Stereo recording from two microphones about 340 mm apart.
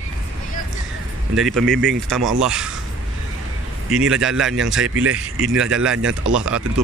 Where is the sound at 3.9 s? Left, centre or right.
Centre.